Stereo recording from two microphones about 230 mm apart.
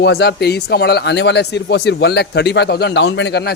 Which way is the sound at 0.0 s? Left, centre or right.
Left.